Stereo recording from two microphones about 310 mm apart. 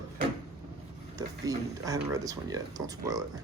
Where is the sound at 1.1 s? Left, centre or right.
Centre.